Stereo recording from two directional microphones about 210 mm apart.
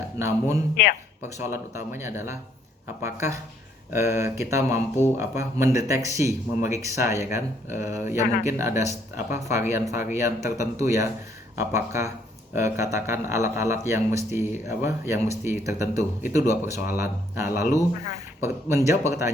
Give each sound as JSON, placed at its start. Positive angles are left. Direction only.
{"t": 0.2, "sound": "speech", "side_deg": -10}